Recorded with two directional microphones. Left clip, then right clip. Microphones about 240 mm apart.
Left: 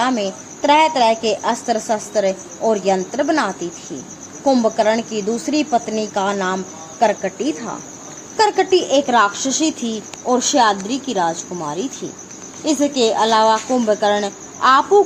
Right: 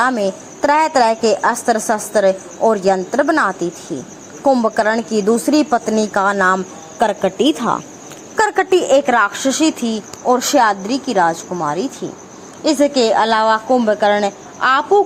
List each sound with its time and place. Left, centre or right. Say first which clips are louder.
0.0 s a woman's voice: right 3 dB; right
8.4 s a woman's voice: right 1 dB; centre